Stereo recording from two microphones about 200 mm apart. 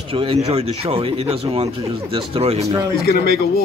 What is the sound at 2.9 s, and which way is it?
Speech, 50° left (ahead or behind).